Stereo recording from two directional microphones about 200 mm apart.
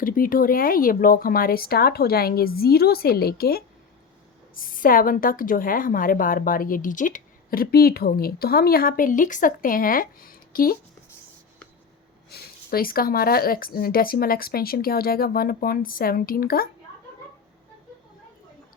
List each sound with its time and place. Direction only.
0.0 s a woman's voice: 45° left (ahead or behind)
4.6 s a woman's voice: 45° left (ahead or behind)
12.3 s a woman's voice: 50° left (ahead or behind)